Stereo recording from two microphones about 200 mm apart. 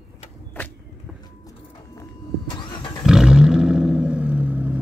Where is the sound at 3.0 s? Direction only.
5° right (ahead or behind).